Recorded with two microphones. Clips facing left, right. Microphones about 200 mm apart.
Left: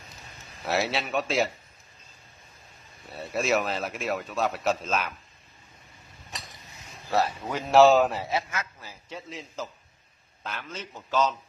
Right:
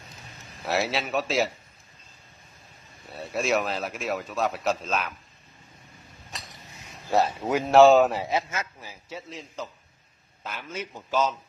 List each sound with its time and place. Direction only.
0.7 s speech: centre (ahead or behind)
3.1 s speech: centre (ahead or behind)
7.1 s a man's voice: 20° right (ahead or behind)
7.7 s speech: centre (ahead or behind)
8.2 s speech: 20° right (ahead or behind)
9.1 s a man's voice: centre (ahead or behind)